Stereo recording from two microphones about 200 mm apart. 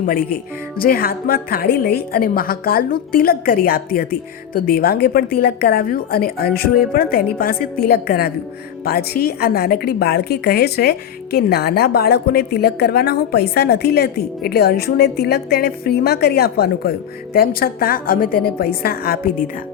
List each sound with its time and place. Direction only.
0.8 s a woman's voice: 50° left (ahead or behind)